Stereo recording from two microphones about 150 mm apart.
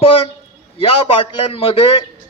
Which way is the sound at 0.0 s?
40° left (ahead or behind).